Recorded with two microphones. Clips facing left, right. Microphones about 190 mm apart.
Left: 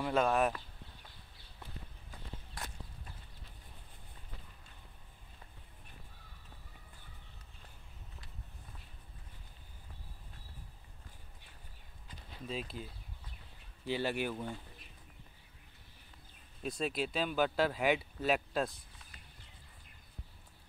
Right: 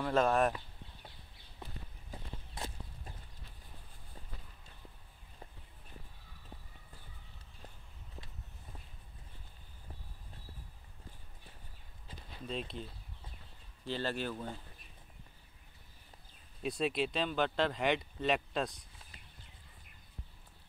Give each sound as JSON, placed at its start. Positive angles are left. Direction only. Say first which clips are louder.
{"t": 0.0, "sound": "speech", "louder": "right 1 dB", "side_deg": 0}
{"t": 2.0, "sound": "walk", "louder": "right 2 dB", "side_deg": -25}
{"t": 12.4, "sound": "speech", "louder": "right 1 dB", "side_deg": 5}
{"t": 13.8, "sound": "speech", "louder": "left 2 dB", "side_deg": 10}
{"t": 16.6, "sound": "speech", "louder": "right 2 dB", "side_deg": 0}